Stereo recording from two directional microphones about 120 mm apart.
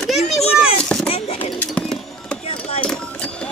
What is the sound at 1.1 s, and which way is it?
Speech, 55° left (ahead or behind).